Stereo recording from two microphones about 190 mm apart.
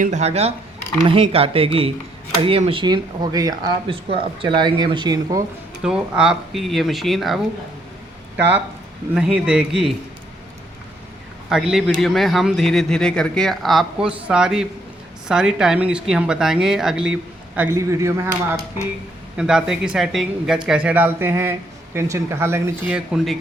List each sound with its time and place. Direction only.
0.0 s speech: 35° right (ahead or behind); by 5.4 s 20° right (ahead or behind)
5.8 s speech: 5° right (ahead or behind)
9.1 s speech: 5° right (ahead or behind)
11.4 s speech: 5° right (ahead or behind)
19.4 s speech: 5° right (ahead or behind)
23.0 s speech: centre (ahead or behind)